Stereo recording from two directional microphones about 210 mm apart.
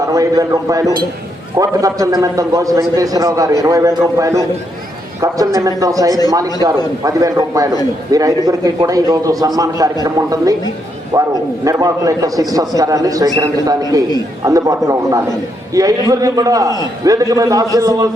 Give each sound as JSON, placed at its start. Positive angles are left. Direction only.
{"t": 0.1, "sound": "a man's voice", "side_deg": -15}